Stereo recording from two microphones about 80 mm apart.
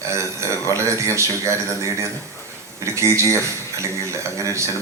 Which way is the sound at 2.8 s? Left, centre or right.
Right.